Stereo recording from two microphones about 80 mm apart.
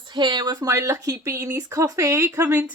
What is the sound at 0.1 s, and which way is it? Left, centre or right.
A woman's voice, right.